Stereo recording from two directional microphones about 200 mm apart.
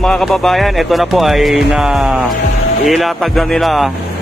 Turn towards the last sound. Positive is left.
turn(degrees=0)  # may be behind; listen again after turning